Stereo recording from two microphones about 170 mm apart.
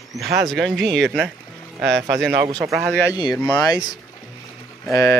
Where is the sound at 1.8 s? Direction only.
90° right.